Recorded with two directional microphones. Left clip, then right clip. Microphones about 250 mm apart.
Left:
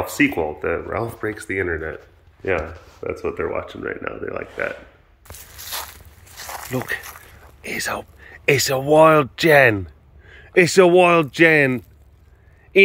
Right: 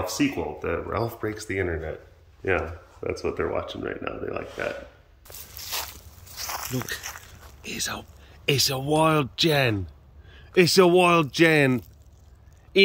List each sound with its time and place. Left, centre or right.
0.2 s speech: centre
5.7 s a sound: centre
6.3 s speech: centre